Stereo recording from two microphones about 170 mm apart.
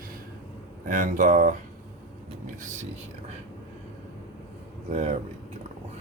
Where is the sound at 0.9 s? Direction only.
50° right (ahead or behind).